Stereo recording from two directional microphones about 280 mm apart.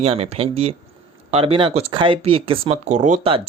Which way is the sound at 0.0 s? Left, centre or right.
Right.